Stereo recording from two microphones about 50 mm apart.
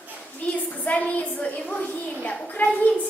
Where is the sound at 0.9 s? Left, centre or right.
Left.